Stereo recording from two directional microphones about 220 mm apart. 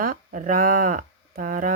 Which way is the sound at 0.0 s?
40° right (ahead or behind).